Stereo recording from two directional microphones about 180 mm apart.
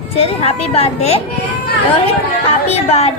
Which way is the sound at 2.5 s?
35° left (ahead or behind).